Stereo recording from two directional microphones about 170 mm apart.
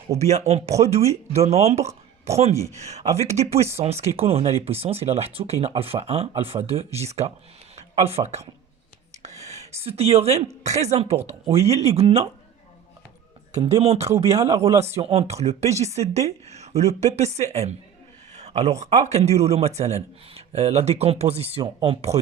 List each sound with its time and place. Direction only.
0.1 s speech: 40° right (ahead or behind)
9.2 s a sound: 40° right (ahead or behind)
10.6 s speech: 40° right (ahead or behind)
13.7 s speech: 35° right (ahead or behind)
14.3 s speech: 20° right (ahead or behind)
14.8 s speech: 40° right (ahead or behind)